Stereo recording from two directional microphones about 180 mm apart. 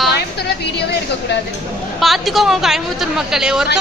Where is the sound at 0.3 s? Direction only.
65° left (ahead or behind).